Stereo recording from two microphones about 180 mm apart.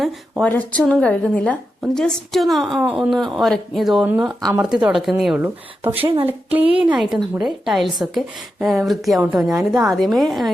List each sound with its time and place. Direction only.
0.0 s a woman's voice: 5° left (ahead or behind)
4.3 s speech: 20° right (ahead or behind)
4.8 s a woman's voice: centre (ahead or behind)